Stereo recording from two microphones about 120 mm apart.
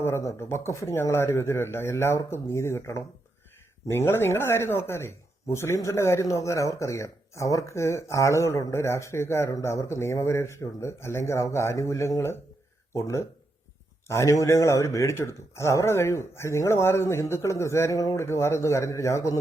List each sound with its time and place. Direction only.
0.0 s speech: 25° left (ahead or behind)